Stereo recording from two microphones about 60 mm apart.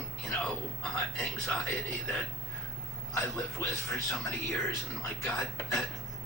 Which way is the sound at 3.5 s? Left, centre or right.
Left.